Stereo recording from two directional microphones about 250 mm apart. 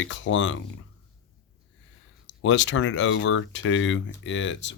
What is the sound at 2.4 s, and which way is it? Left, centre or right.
Speech, left.